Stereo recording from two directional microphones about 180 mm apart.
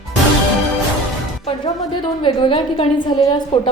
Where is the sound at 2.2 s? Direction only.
30° left (ahead or behind).